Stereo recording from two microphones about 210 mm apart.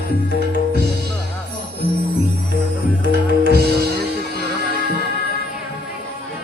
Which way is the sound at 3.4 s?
50° right (ahead or behind).